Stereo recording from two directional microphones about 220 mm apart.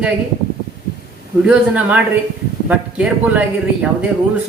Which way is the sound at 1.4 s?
5° right (ahead or behind).